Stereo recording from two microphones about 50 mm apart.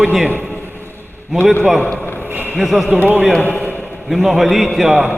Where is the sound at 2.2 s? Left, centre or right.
Right.